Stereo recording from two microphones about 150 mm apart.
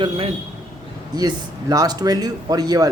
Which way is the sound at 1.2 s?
25° right (ahead or behind).